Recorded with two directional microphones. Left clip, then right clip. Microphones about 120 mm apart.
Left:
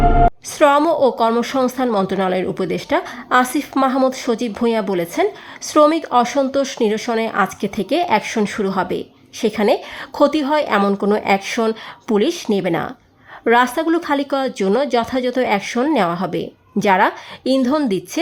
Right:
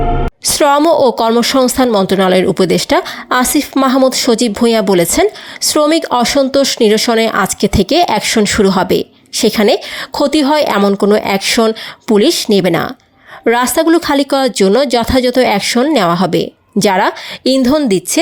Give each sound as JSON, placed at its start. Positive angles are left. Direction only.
{"t": 0.5, "sound": "a woman's voice", "side_deg": -40}